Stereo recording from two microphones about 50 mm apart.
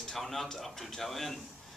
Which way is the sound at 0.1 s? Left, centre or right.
Centre.